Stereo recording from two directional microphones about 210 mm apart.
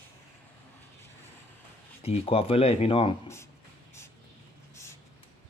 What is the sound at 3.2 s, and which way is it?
Speech, 15° left (ahead or behind).